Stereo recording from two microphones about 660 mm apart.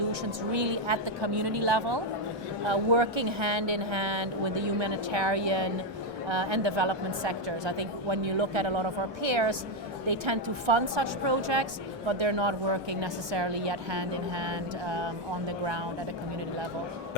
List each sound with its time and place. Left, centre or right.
0.3 s a woman's voice: right